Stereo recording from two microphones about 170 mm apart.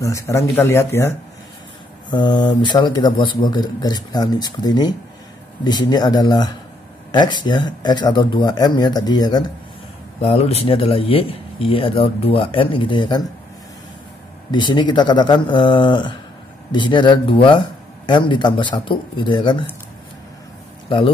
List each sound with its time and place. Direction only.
0.0 s speech: 15° left (ahead or behind)
2.0 s speech: 25° left (ahead or behind)
10.2 s speech: 35° left (ahead or behind)
14.5 s speech: 25° left (ahead or behind)